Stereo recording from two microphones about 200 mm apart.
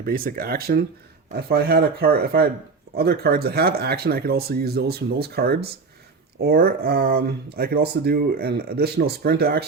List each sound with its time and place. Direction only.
0.0 s speech: 45° right (ahead or behind)